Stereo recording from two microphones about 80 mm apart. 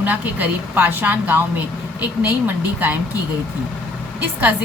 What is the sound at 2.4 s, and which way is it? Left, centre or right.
Speech, right.